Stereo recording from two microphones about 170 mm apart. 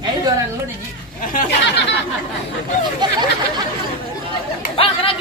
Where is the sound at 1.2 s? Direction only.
50° left (ahead or behind).